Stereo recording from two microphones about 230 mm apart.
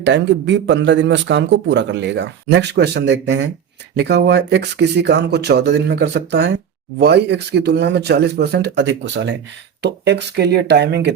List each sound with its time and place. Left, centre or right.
0.0 s a man's voice: right